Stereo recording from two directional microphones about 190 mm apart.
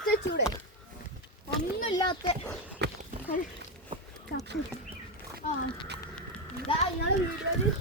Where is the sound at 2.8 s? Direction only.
65° right (ahead or behind).